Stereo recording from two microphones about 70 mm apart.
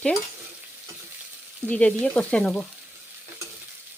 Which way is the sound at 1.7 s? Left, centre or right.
Centre.